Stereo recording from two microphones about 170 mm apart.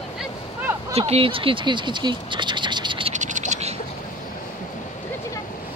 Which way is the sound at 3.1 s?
45° right (ahead or behind).